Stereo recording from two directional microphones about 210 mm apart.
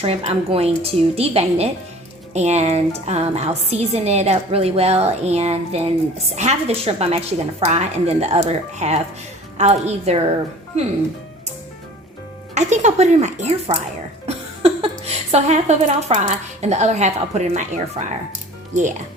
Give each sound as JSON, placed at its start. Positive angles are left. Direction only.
{"t": 0.0, "sound": "a woman's voice", "side_deg": -30}
{"t": 12.5, "sound": "a woman's voice", "side_deg": -35}